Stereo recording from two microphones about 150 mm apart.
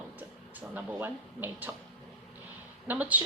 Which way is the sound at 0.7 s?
10° right (ahead or behind).